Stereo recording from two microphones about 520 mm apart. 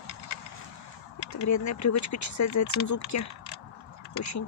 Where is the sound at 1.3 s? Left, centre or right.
Left.